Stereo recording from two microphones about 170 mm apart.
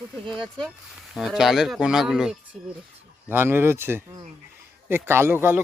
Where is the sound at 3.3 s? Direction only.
15° right (ahead or behind).